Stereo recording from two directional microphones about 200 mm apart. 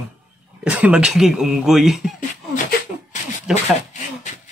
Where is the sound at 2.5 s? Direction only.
40° left (ahead or behind).